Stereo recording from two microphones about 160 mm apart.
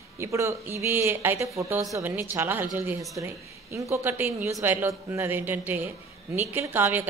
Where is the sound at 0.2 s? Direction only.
20° right (ahead or behind).